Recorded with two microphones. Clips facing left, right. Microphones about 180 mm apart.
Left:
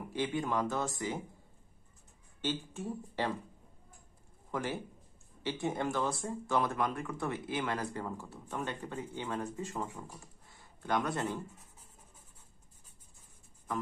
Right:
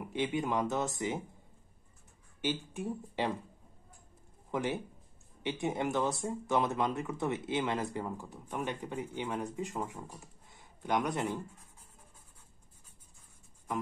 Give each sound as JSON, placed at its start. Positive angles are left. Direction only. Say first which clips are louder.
{"t": 0.1, "sound": "speech", "louder": "right 1 dB", "side_deg": -20}
{"t": 2.4, "sound": "speech", "louder": "right 2 dB", "side_deg": -15}
{"t": 4.5, "sound": "speech", "louder": "right 3 dB", "side_deg": -20}